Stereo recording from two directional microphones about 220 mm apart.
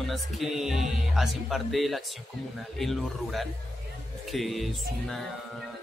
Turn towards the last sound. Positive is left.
turn(degrees=0)  # may be behind; listen again after turning